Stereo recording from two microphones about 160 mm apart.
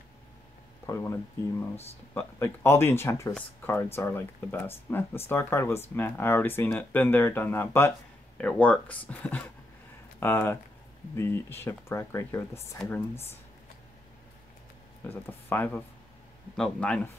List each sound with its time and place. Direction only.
0.8 s speech: 20° left (ahead or behind)
2.1 s speech: 15° left (ahead or behind)
15.0 s speech: 10° left (ahead or behind)